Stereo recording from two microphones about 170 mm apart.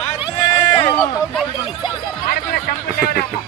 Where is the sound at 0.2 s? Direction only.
35° left (ahead or behind).